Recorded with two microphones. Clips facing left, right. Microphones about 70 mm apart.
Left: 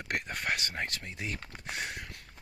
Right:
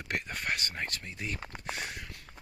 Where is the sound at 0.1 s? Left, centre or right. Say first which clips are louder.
Left 1 dB; left.